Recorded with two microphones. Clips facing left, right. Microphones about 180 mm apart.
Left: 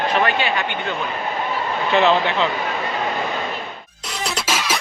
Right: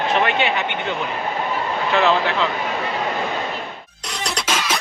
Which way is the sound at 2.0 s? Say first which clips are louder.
Left 1 dB; centre (ahead or behind).